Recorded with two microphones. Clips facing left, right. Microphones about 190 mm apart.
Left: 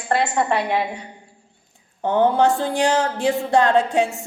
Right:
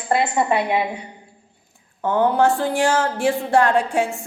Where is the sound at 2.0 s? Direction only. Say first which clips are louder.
Even; 20° left (ahead or behind).